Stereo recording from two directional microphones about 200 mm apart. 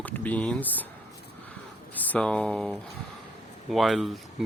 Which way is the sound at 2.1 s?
5° left (ahead or behind).